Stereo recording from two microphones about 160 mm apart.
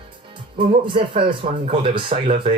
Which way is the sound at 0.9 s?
35° right (ahead or behind).